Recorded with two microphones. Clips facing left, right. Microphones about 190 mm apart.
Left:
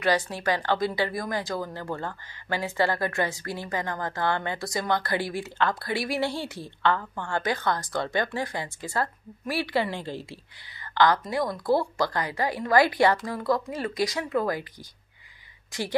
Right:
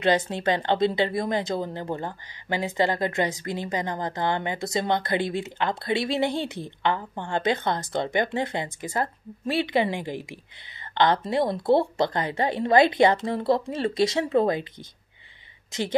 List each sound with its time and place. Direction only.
0.0 s a woman's voice: 20° right (ahead or behind)